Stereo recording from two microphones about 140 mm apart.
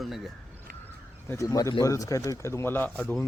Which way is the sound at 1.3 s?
20° left (ahead or behind).